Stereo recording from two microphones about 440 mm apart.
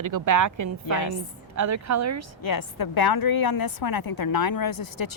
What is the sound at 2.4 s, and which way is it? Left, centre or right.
A woman's voice, left.